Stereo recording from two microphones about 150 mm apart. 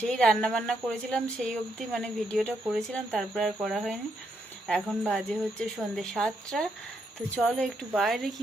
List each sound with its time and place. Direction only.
0.0 s speech: 5° left (ahead or behind)